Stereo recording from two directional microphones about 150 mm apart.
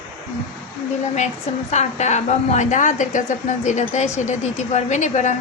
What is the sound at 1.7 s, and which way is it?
A woman's voice, 50° left (ahead or behind).